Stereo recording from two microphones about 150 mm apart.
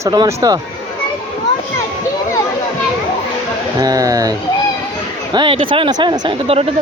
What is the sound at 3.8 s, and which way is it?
Speech, 25° right (ahead or behind).